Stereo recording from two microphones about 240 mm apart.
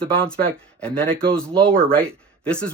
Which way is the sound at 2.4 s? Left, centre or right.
Centre.